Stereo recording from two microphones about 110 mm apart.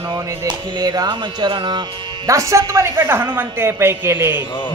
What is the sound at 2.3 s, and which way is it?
Speech, 30° right (ahead or behind).